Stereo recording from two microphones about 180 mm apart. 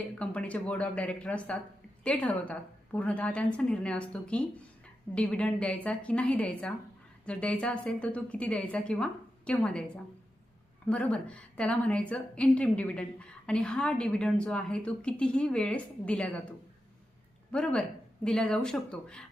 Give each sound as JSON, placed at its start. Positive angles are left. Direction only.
{"t": 0.2, "sound": "a woman's voice", "side_deg": 5}